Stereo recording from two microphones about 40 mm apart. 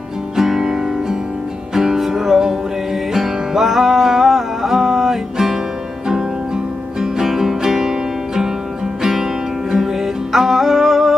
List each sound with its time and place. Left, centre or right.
0.4 s music: centre
9.7 s music: centre